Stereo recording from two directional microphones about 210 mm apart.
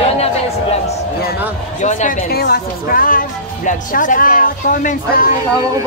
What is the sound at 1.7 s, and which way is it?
Speech, 35° left (ahead or behind).